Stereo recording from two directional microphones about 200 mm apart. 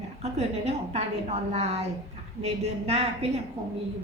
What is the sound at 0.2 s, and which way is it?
A woman's voice, 35° right (ahead or behind).